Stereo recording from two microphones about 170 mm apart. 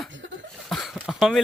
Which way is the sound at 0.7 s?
Centre (ahead or behind).